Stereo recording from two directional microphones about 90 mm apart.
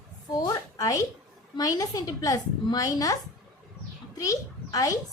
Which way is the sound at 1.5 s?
40° left (ahead or behind).